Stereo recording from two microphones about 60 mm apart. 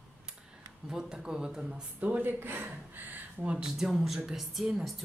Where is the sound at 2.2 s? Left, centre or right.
Right.